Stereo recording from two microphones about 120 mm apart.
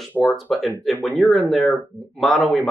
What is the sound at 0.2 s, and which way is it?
Speech, 15° left (ahead or behind).